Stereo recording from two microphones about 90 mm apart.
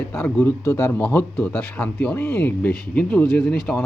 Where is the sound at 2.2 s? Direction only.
25° left (ahead or behind); by 3.8 s 5° left (ahead or behind).